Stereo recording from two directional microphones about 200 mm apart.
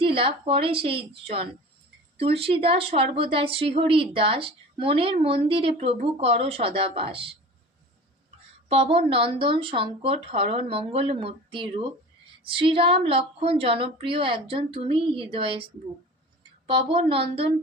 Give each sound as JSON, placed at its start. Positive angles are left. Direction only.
{"t": 0.2, "sound": "speech", "side_deg": -30}
{"t": 8.7, "sound": "speech", "side_deg": -30}